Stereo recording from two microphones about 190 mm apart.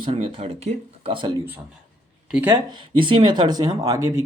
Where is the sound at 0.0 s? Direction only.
30° right (ahead or behind).